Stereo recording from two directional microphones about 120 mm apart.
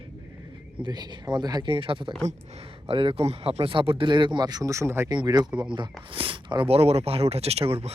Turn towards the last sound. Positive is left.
turn(degrees=-55)  # may be behind; listen again after turning